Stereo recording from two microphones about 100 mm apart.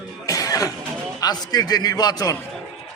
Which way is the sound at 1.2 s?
40° left (ahead or behind).